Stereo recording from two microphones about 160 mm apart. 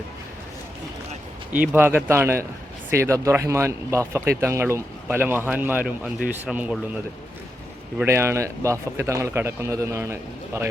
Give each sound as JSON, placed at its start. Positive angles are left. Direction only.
{"t": 1.7, "sound": "speech", "side_deg": -10}